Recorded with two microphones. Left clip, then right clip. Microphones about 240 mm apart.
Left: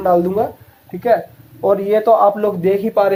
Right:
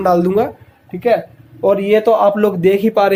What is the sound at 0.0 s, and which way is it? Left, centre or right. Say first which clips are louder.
Speech: right 1 dB; right.